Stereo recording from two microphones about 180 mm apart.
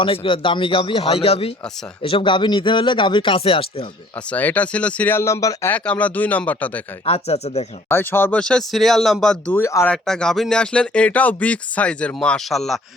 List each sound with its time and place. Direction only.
0.0 s speech: 30° left (ahead or behind)
4.3 s speech: 10° left (ahead or behind)
7.0 s speech: 35° left (ahead or behind)
7.9 s speech: 10° left (ahead or behind)
9.9 s speech: 5° left (ahead or behind)